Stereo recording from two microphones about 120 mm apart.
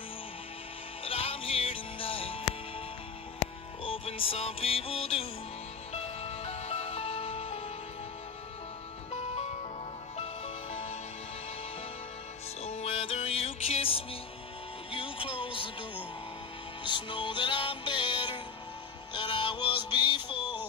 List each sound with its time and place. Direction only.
1.0 s music: 50° left (ahead or behind)
3.8 s music: 50° left (ahead or behind)
9.1 s music: 65° left (ahead or behind)
10.1 s music: 55° left (ahead or behind)
12.6 s music: 65° left (ahead or behind); by 15.7 s 45° left (ahead or behind)
16.8 s music: 40° left (ahead or behind)